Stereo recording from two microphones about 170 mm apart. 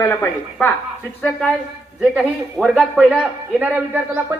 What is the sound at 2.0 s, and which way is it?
A man's voice, centre (ahead or behind).